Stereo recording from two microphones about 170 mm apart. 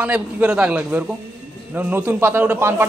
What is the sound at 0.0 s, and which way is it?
A man's voice, 5° right (ahead or behind).